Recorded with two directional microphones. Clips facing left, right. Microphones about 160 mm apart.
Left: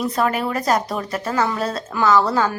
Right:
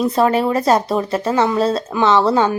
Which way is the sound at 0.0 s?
30° right (ahead or behind).